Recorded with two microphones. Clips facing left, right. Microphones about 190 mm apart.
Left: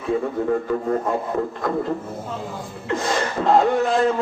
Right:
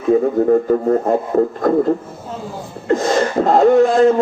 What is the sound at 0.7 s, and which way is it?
Speech, 40° right (ahead or behind).